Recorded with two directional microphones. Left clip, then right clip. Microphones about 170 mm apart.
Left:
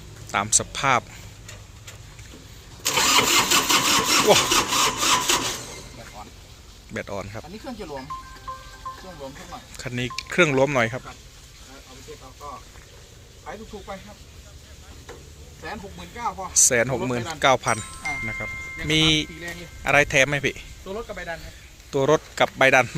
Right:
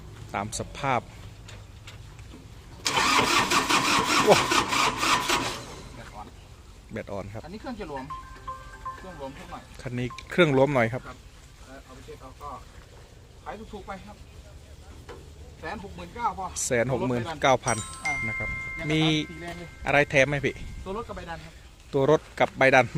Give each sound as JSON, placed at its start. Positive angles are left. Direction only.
{"t": 0.3, "sound": "speech", "side_deg": 0}
{"t": 2.8, "sound": "engine starting", "side_deg": -10}
{"t": 6.9, "sound": "speech", "side_deg": -5}
{"t": 7.6, "sound": "speech", "side_deg": 10}
{"t": 9.0, "sound": "speech", "side_deg": 10}
{"t": 9.7, "sound": "speech", "side_deg": -10}
{"t": 13.4, "sound": "speech", "side_deg": 5}
{"t": 15.6, "sound": "speech", "side_deg": 15}
{"t": 16.6, "sound": "speech", "side_deg": -10}
{"t": 17.7, "sound": "speech", "side_deg": 0}
{"t": 21.8, "sound": "speech", "side_deg": -15}